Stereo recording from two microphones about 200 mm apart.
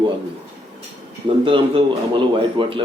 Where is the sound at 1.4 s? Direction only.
25° right (ahead or behind).